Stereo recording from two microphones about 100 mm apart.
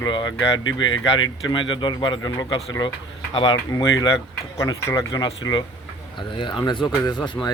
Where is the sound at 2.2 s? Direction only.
40° left (ahead or behind).